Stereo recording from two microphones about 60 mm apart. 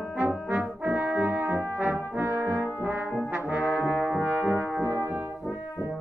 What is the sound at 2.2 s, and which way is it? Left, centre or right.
Brass instrument, right.